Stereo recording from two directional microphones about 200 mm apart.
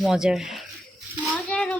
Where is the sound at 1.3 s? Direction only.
5° left (ahead or behind).